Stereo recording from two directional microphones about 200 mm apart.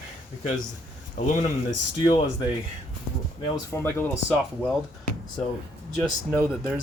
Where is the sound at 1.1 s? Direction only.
40° left (ahead or behind).